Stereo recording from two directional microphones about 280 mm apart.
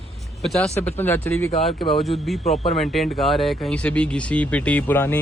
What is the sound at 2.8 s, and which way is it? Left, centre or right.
Speech, centre.